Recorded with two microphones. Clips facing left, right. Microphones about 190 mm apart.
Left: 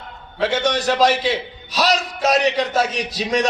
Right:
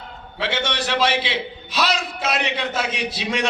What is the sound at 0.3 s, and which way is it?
A man's voice, 45° left (ahead or behind).